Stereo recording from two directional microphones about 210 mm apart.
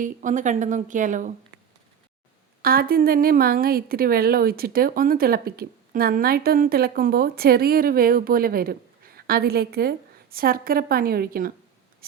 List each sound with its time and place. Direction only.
0.0 s a woman's voice: 35° right (ahead or behind)
2.6 s a woman's voice: 45° right (ahead or behind)